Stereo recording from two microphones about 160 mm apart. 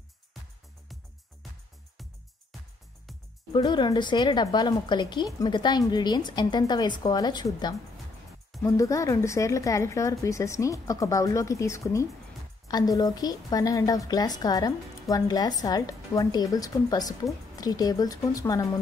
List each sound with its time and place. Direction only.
3.5 s a woman's voice: 30° left (ahead or behind)